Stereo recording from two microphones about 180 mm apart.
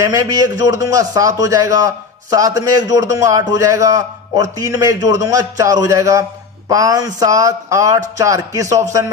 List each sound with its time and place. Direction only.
0.0 s a man's voice: 20° right (ahead or behind)